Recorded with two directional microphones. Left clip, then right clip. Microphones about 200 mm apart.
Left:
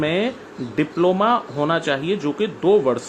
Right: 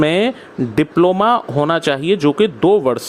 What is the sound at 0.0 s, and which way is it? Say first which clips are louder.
Speech: right 6 dB; 55° right (ahead or behind).